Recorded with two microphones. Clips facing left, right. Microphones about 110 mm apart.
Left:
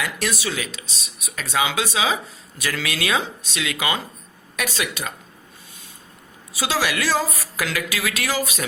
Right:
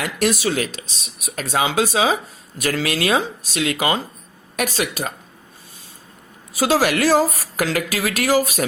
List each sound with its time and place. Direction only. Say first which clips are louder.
0.0 s speech: right 6 dB; 40° right (ahead or behind)
6.6 s speech: right 6 dB; 40° right (ahead or behind)